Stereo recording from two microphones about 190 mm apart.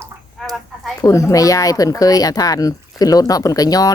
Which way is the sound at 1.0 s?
15° left (ahead or behind).